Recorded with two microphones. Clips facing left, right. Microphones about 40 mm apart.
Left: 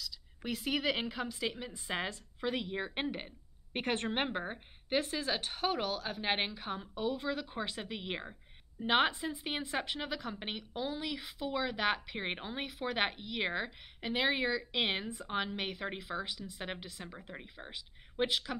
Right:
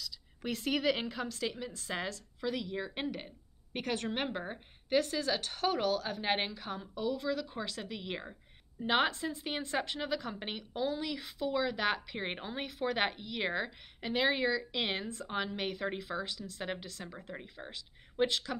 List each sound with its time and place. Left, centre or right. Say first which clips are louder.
0.0 s a woman's voice: right 2 dB; centre